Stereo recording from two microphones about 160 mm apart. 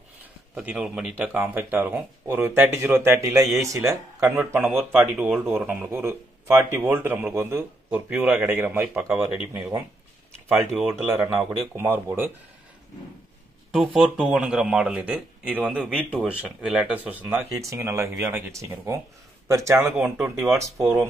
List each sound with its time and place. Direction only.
0.6 s speech: 5° right (ahead or behind)
4.6 s speech: centre (ahead or behind)
10.7 s speech: centre (ahead or behind)
11.7 s speech: 15° right (ahead or behind)
13.7 s speech: centre (ahead or behind); by 20.9 s 20° right (ahead or behind)